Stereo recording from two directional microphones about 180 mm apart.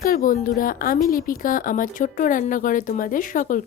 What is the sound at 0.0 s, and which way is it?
Speech, 50° left (ahead or behind).